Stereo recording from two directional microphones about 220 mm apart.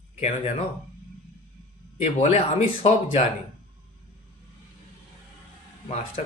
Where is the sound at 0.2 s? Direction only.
30° left (ahead or behind).